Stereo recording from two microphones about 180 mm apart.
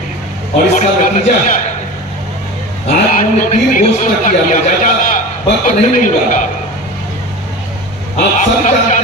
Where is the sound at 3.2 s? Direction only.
45° left (ahead or behind).